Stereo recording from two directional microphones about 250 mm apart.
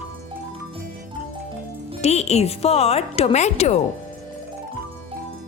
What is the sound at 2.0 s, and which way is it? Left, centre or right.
A woman's voice, left.